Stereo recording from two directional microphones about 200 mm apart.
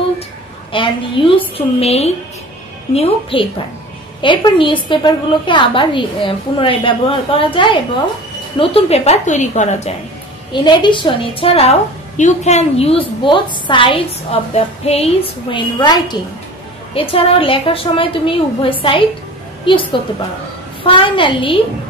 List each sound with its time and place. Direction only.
0.7 s a woman's voice: 25° left (ahead or behind)
10.5 s a woman's voice: 20° left (ahead or behind)